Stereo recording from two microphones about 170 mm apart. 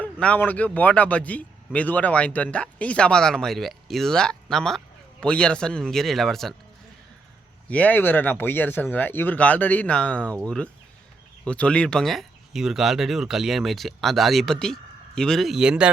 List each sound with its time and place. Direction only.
0.0 s a man's voice: 10° left (ahead or behind)
7.7 s a man's voice: 10° left (ahead or behind)